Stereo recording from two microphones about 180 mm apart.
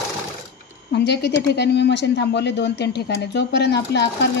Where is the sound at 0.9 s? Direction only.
70° left (ahead or behind).